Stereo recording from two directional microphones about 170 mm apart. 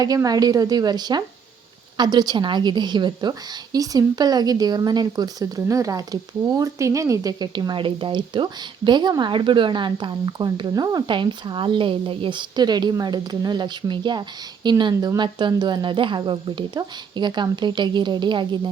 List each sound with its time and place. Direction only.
0.0 s a woman's voice: 20° right (ahead or behind)